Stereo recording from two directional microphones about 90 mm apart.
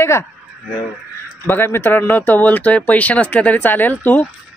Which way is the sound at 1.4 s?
25° left (ahead or behind).